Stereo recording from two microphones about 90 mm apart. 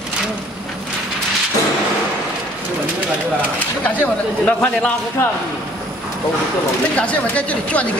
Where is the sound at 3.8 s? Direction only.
15° left (ahead or behind).